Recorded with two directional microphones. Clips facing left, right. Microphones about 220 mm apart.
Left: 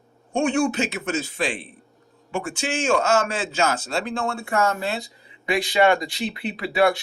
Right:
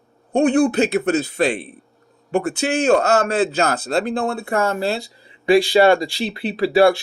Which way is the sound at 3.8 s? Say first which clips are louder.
Right 7 dB; 55° right (ahead or behind).